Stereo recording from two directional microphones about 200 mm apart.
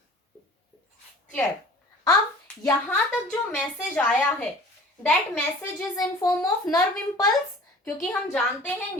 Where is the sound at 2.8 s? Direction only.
5° left (ahead or behind).